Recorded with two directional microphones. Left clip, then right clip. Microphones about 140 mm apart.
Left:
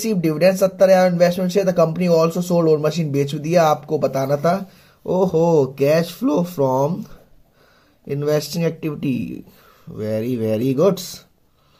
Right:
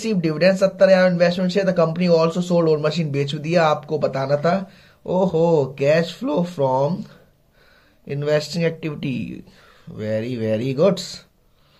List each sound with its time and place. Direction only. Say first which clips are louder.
0.0 s speech: left 2 dB; 45° left (ahead or behind)
8.1 s speech: left 1 dB; 40° left (ahead or behind)